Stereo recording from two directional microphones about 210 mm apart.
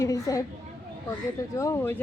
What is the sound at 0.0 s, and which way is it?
Speech, 15° left (ahead or behind).